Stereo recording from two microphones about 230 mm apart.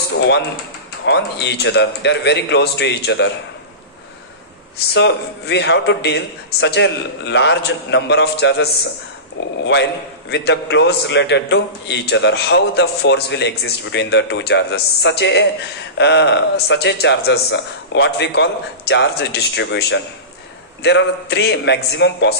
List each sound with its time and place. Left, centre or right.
1.0 s a man's voice: left
4.7 s a man's voice: left
10.3 s a man's voice: left